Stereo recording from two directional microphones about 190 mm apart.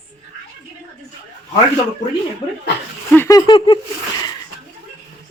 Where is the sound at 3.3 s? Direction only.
20° left (ahead or behind).